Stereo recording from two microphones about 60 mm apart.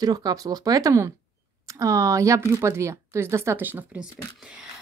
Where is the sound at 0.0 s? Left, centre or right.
Right.